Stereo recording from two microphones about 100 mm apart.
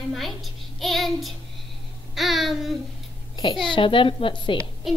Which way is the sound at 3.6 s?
60° left (ahead or behind).